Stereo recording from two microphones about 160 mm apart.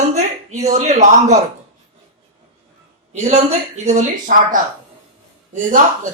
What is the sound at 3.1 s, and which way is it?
Speech, 45° right (ahead or behind).